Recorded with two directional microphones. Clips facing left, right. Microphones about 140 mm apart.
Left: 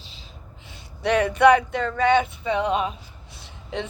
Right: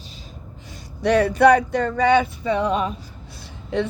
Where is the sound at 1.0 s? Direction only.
35° right (ahead or behind).